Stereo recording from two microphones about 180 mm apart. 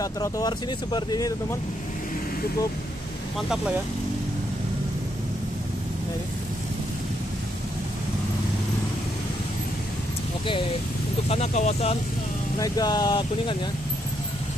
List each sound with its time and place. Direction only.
0.0 s speech: 20° left (ahead or behind)
3.3 s speech: 5° right (ahead or behind)
11.2 s speech: 35° left (ahead or behind)
12.5 s speech: 20° left (ahead or behind)